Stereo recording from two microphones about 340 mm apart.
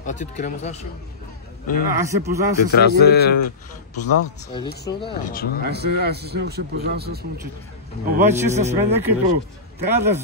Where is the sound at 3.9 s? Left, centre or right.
Left.